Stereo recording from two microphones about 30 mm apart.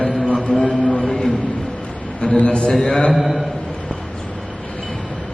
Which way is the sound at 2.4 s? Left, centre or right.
Left.